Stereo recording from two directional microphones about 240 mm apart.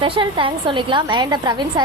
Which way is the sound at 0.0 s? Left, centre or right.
Centre.